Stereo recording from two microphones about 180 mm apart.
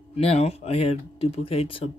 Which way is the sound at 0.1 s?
35° left (ahead or behind).